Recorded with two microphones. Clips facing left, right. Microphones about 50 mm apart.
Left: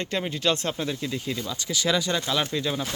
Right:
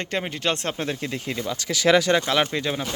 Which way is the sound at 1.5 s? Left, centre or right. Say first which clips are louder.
Right 8 dB; right.